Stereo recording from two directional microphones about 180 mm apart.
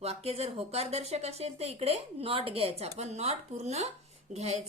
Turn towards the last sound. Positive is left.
turn(degrees=-40)  # may be behind; listen again after turning